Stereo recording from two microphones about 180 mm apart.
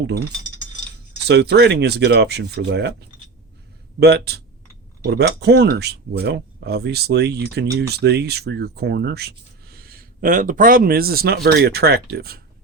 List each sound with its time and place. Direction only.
1.3 s speech: 70° right (ahead or behind)
4.0 s speech: 65° right (ahead or behind)